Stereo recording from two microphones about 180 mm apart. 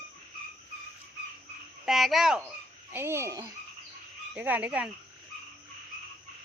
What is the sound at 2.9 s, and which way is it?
Speech, 15° right (ahead or behind).